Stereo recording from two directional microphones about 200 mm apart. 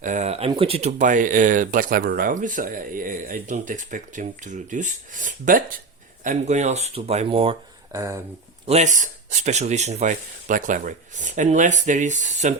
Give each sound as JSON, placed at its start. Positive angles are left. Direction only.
{"t": 0.0, "sound": "speech", "side_deg": -35}
{"t": 7.9, "sound": "speech", "side_deg": -15}
{"t": 8.6, "sound": "speech", "side_deg": -35}